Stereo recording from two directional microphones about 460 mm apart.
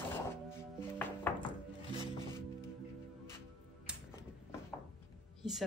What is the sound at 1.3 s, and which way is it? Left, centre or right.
Music, centre.